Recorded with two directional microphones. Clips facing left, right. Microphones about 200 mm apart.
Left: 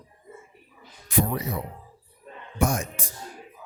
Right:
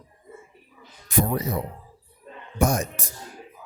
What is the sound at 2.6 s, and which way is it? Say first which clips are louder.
Speech: right 2 dB; 40° right (ahead or behind).